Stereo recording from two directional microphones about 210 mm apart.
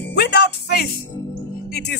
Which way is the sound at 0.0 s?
50° left (ahead or behind).